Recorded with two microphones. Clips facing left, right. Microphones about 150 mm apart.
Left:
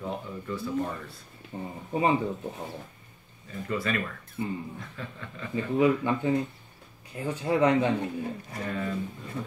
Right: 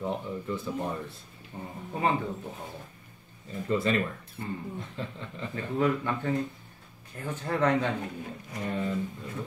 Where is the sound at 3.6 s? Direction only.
25° right (ahead or behind).